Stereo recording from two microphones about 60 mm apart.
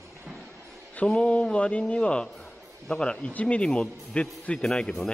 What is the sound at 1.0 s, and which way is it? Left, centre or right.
Speech, centre.